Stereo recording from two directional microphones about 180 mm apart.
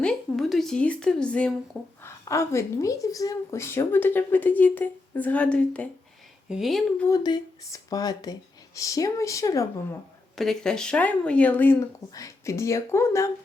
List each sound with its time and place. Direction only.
0.0 s speech: 5° left (ahead or behind)
2.0 s a woman's voice: 15° left (ahead or behind); by 6.8 s centre (ahead or behind)
7.1 s speech: 25° left (ahead or behind)
10.3 s a woman's voice: centre (ahead or behind)